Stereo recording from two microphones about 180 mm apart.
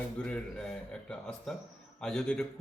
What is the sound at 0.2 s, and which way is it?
A man's voice, 5° left (ahead or behind).